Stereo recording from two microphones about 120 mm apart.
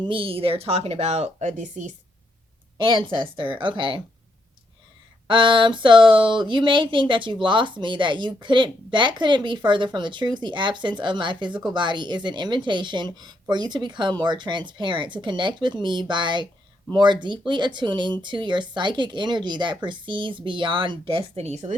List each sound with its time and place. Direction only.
0.0 s speech: 45° right (ahead or behind); by 2.0 s 90° right
2.7 s speech: 40° right (ahead or behind)
5.3 s speech: 40° right (ahead or behind); by 21.8 s 70° right (ahead or behind)